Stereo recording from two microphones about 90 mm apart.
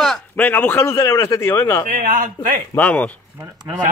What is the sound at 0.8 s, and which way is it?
A man's voice, 30° left (ahead or behind).